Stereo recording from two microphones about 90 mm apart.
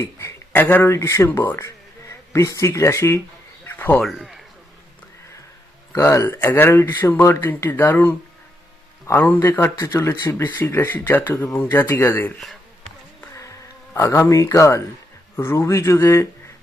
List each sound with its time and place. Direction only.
0.0 s speech: 30° left (ahead or behind)
3.7 s a sound: 20° left (ahead or behind)
4.0 s a man's voice: centre (ahead or behind)
5.9 s speech: 35° left (ahead or behind)
6.2 s a man's voice: 20° left (ahead or behind)
13.9 s a man's voice: 35° left (ahead or behind)